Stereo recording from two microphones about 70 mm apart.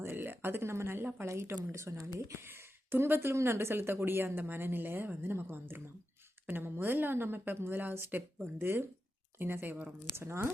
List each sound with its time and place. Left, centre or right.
0.0 s speech: right